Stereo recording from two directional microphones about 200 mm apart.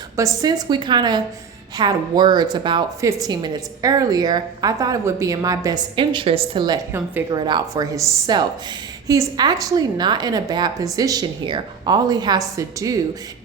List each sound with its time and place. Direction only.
0.2 s a woman's voice: 15° right (ahead or behind)
7.3 s a woman's voice: 20° right (ahead or behind)